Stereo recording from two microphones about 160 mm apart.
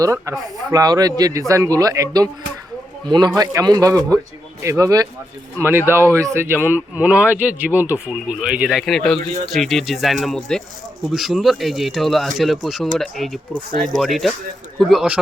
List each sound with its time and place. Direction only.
0.0 s a man's voice: 20° right (ahead or behind); by 15.2 s 5° right (ahead or behind)